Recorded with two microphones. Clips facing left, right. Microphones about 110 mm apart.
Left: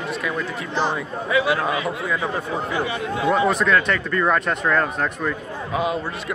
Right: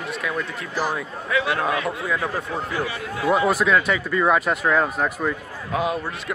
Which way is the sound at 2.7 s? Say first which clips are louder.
Left 3 dB; 20° left (ahead or behind).